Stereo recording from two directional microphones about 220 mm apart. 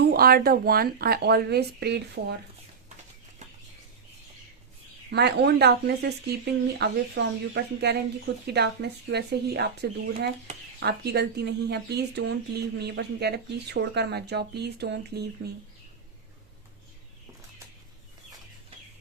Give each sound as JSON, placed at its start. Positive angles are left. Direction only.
{"t": 0.0, "sound": "speech", "side_deg": -45}
{"t": 5.1, "sound": "speech", "side_deg": -50}